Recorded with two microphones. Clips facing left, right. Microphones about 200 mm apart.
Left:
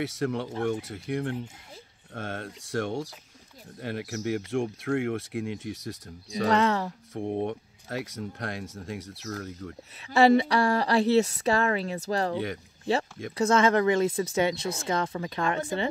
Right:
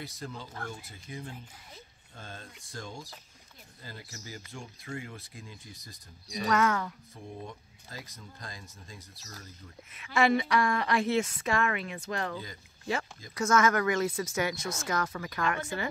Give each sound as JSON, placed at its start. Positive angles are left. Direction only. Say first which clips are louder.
{"t": 0.0, "sound": "speech", "louder": "left 13 dB", "side_deg": 75}
{"t": 4.5, "sound": "speech", "louder": "left 15 dB", "side_deg": 85}
{"t": 6.4, "sound": "a woman's voice", "louder": "left 4 dB", "side_deg": 30}
{"t": 7.2, "sound": "speech", "louder": "left 15 dB", "side_deg": 70}
{"t": 9.9, "sound": "a woman's voice", "louder": "left 6 dB", "side_deg": 35}
{"t": 13.4, "sound": "speech", "louder": "left 4 dB", "side_deg": 30}